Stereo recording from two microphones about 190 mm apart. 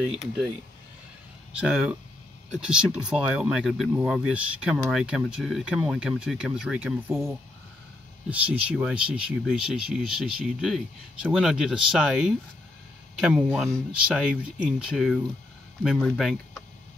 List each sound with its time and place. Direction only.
1.5 s speech: 5° right (ahead or behind)